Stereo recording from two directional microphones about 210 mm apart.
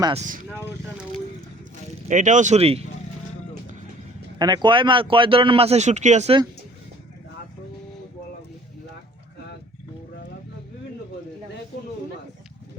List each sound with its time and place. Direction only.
0.0 s speech: 30° right (ahead or behind)
2.0 s speech: 35° right (ahead or behind)
4.4 s speech: 20° right (ahead or behind)